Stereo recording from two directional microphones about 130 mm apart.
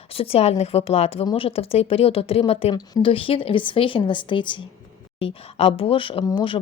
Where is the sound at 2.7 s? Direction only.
30° left (ahead or behind).